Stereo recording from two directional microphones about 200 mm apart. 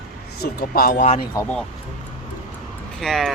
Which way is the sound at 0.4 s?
50° left (ahead or behind).